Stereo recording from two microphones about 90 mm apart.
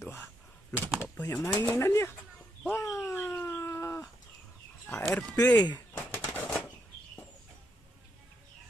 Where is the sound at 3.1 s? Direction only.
20° left (ahead or behind).